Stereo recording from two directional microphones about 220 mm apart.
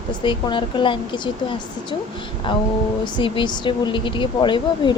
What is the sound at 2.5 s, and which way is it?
A woman's voice, 20° left (ahead or behind).